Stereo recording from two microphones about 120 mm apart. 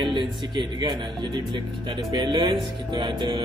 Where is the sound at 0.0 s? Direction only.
40° right (ahead or behind).